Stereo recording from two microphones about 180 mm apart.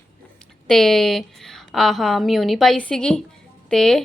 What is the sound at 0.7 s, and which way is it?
A woman's voice, centre (ahead or behind).